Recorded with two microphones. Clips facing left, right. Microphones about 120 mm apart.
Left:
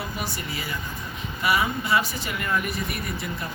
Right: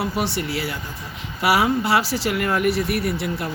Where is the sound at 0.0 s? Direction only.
75° right (ahead or behind).